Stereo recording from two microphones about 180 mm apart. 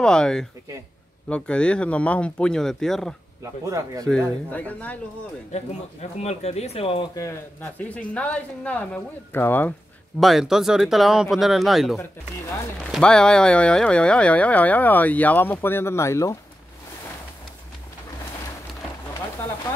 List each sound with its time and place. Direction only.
0.0 s speech: 5° left (ahead or behind)
3.6 s speech: 20° right (ahead or behind)
4.5 s speech: 10° left (ahead or behind)
5.5 s speech: 35° left (ahead or behind)
7.2 s speech: 15° left (ahead or behind)
10.2 s speech: centre (ahead or behind); by 16.3 s 15° left (ahead or behind)